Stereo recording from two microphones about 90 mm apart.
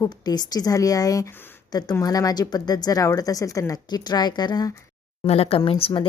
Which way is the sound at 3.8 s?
50° left (ahead or behind).